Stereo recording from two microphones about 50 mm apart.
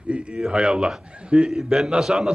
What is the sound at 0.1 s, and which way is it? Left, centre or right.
A man's voice, right.